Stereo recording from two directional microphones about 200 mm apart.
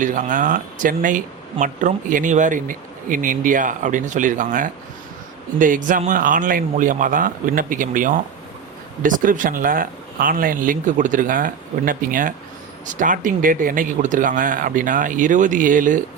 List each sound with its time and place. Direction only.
0.0 s speech: 40° right (ahead or behind)